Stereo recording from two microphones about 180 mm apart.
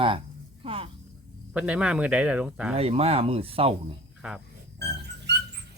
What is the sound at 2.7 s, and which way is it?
Speech, 35° right (ahead or behind).